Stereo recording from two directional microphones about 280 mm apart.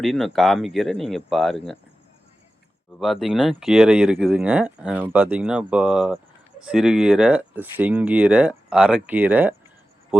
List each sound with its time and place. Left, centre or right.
0.0 s speech: centre
3.0 s speech: centre